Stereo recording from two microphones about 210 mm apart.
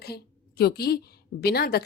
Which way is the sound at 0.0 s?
50° left (ahead or behind).